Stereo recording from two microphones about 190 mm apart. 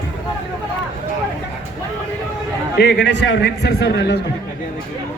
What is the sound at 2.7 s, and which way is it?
A man's voice, 60° left (ahead or behind).